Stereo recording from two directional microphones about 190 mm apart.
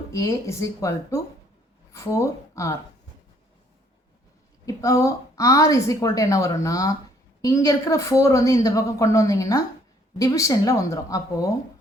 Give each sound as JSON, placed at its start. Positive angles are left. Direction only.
{"t": 0.1, "sound": "a woman's voice", "side_deg": 15}
{"t": 4.6, "sound": "a woman's voice", "side_deg": 15}